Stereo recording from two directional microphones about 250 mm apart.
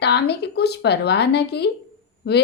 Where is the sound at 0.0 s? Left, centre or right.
Left.